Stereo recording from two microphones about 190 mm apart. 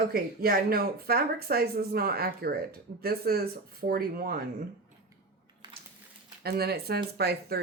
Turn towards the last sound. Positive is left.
turn(degrees=-55)  # may be behind; listen again after turning